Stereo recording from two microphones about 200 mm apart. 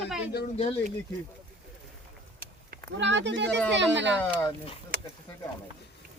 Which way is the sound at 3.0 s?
65° right (ahead or behind).